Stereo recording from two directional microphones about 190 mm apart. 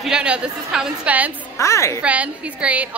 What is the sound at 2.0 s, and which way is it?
Speech, 5° right (ahead or behind).